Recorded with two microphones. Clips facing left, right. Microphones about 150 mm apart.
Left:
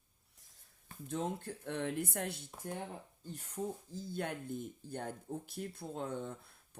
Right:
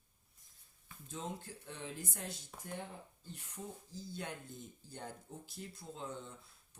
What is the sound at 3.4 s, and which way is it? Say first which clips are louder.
Speech: left 9 dB; 50° left (ahead or behind).